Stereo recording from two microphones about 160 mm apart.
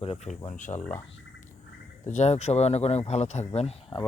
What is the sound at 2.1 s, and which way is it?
Speech, 45° left (ahead or behind).